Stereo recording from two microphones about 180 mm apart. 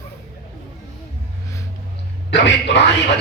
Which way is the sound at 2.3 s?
80° left.